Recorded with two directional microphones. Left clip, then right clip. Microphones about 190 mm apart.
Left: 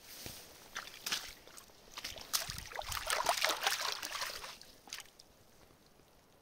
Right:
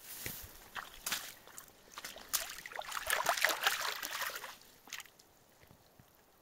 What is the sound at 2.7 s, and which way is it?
Boat, 25° left (ahead or behind).